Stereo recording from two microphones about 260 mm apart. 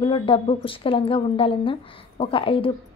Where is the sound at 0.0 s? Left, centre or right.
Centre.